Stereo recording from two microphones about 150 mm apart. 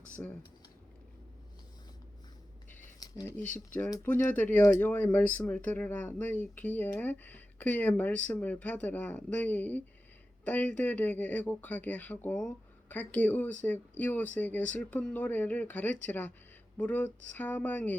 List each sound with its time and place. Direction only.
0.2 s speech: 10° left (ahead or behind)
3.0 s a sound: 25° left (ahead or behind)
4.0 s speech: 10° left (ahead or behind)